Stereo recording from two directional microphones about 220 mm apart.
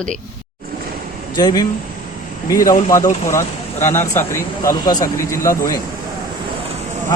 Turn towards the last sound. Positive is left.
turn(degrees=15)  # may be behind; listen again after turning